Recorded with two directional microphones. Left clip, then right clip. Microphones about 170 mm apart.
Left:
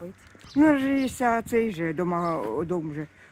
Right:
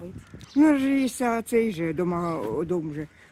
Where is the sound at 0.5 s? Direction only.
20° right (ahead or behind).